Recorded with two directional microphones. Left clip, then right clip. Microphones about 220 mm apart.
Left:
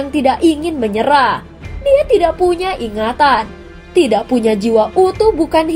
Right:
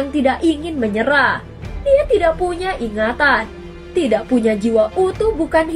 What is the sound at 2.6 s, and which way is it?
Speech, 30° left (ahead or behind).